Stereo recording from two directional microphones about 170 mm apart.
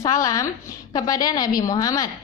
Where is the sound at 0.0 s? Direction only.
20° left (ahead or behind).